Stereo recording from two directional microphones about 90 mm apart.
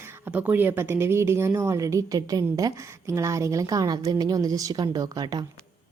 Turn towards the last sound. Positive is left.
turn(degrees=-45)  # may be behind; listen again after turning